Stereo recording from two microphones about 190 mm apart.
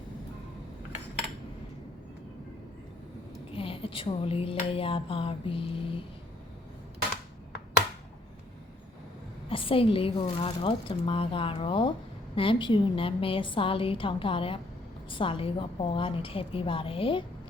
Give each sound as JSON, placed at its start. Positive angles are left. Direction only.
{"t": 3.5, "sound": "speech", "side_deg": 30}
{"t": 9.5, "sound": "speech", "side_deg": 30}